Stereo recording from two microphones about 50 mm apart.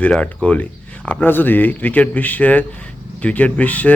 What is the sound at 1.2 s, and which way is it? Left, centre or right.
A man's voice, left.